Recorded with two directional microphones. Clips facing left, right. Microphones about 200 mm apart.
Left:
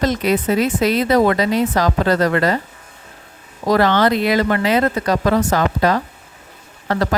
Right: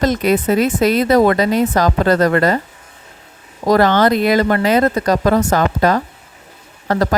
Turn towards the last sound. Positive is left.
turn(degrees=-40)  # may be behind; listen again after turning